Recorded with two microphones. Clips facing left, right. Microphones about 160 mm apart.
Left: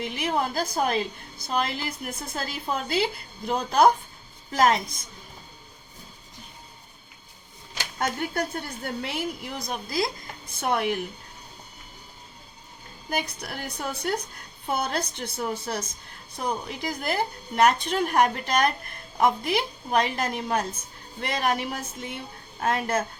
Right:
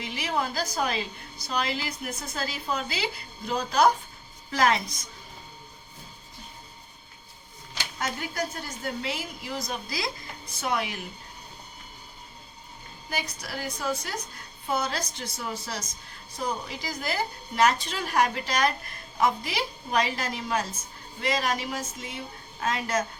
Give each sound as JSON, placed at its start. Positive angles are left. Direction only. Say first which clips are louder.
{"t": 0.0, "sound": "a woman's voice", "louder": "left 3 dB", "side_deg": 55}
{"t": 7.9, "sound": "a woman's voice", "louder": "left 4 dB", "side_deg": 60}
{"t": 13.1, "sound": "a woman's voice", "louder": "left 4 dB", "side_deg": 55}